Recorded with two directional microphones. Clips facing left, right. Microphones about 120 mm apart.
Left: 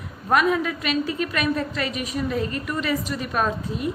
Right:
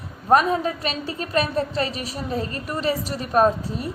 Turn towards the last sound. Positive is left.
turn(degrees=-35)  # may be behind; listen again after turning